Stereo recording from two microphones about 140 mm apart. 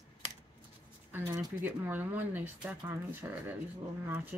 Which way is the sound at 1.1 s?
20° right (ahead or behind).